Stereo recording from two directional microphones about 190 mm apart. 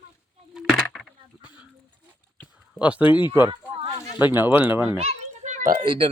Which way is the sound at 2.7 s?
5° right (ahead or behind).